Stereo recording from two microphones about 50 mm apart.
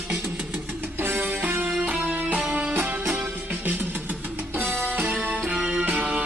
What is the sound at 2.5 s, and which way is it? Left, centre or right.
Music, right.